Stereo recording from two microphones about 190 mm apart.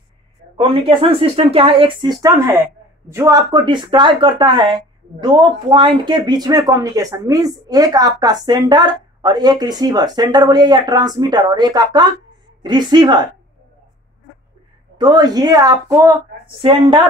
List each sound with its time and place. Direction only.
0.6 s speech: 25° right (ahead or behind)
15.0 s speech: 20° right (ahead or behind)